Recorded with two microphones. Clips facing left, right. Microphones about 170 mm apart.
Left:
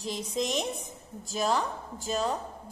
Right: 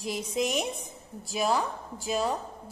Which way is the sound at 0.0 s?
10° right (ahead or behind).